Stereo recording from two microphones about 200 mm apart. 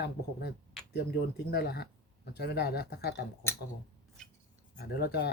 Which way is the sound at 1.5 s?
50° left (ahead or behind).